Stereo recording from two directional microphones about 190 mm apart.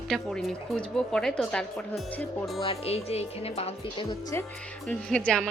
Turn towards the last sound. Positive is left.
turn(degrees=5)  # may be behind; listen again after turning